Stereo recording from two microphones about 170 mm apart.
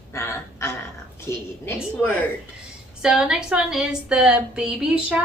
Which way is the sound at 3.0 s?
5° right (ahead or behind).